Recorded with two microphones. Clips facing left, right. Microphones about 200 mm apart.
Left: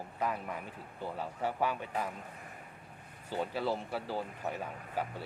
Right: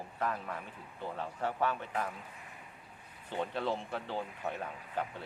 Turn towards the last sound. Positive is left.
turn(degrees=5)  # may be behind; listen again after turning